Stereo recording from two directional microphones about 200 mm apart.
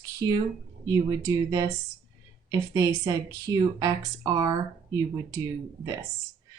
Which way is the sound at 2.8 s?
20° right (ahead or behind).